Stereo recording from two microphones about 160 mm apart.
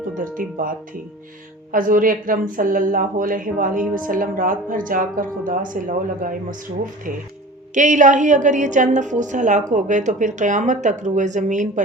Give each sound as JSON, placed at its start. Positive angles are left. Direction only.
{"t": 0.1, "sound": "music", "side_deg": -60}
{"t": 1.7, "sound": "speech", "side_deg": -60}
{"t": 7.7, "sound": "a woman's voice", "side_deg": -50}